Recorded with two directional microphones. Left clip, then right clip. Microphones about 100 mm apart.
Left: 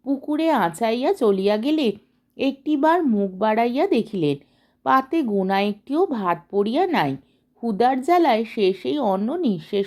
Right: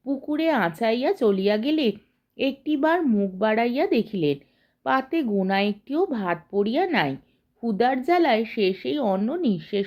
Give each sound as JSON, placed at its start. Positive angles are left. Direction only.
{"t": 0.0, "sound": "speech", "side_deg": 35}